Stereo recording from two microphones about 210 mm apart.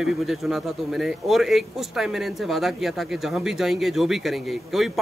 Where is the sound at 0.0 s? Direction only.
Centre (ahead or behind).